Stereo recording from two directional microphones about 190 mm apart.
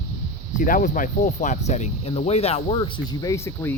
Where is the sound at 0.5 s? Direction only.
45° left (ahead or behind).